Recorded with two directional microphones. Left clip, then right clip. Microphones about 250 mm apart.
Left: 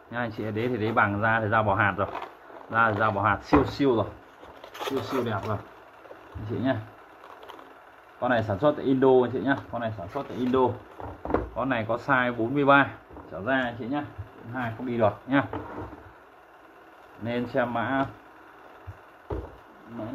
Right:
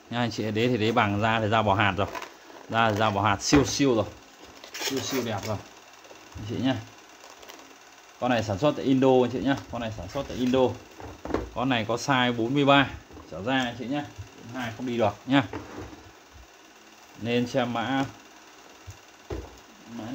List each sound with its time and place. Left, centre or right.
0.1 s a man's voice: right
4.6 s a sound: centre
5.2 s speech: right
8.2 s speech: right
11.5 s a man's voice: right
17.2 s a man's voice: right